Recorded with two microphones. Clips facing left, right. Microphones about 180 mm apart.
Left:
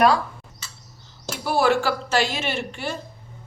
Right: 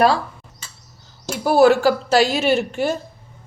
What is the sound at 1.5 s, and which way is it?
A woman's voice, 40° right (ahead or behind).